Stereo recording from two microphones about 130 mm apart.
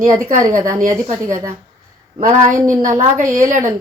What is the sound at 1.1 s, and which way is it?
Speech, 70° right (ahead or behind).